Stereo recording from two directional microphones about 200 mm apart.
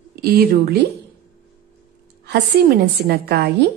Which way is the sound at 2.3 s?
55° right (ahead or behind).